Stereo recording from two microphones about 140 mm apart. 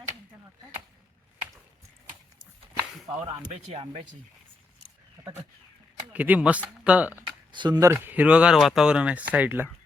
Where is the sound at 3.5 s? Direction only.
50° right (ahead or behind).